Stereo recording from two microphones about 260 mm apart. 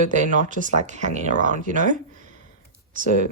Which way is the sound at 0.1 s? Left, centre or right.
Right.